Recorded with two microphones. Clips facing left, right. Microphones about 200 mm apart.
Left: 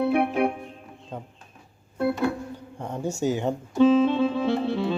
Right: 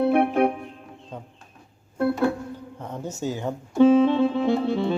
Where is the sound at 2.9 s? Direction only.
10° left (ahead or behind).